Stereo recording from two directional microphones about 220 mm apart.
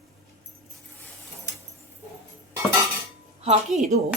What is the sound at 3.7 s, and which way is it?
Speech, 35° right (ahead or behind).